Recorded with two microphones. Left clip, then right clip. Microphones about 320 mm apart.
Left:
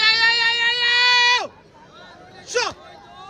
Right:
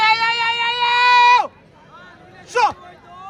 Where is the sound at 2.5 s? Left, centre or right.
Centre.